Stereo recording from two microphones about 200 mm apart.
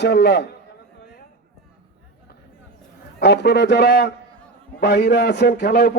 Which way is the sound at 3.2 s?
55° left (ahead or behind).